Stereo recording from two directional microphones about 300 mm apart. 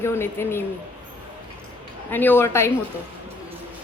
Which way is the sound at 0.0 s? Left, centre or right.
Centre.